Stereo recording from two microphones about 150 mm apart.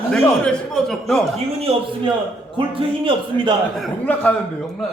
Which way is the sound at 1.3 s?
40° right (ahead or behind).